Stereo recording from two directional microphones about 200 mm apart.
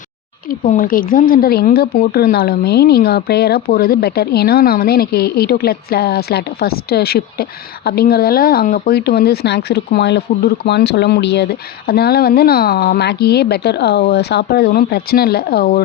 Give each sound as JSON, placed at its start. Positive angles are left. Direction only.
{"t": 0.6, "sound": "speech", "side_deg": 45}